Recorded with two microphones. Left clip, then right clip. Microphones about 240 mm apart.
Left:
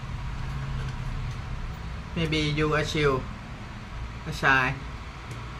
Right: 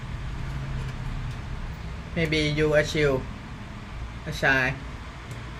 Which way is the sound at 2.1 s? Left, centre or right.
Centre.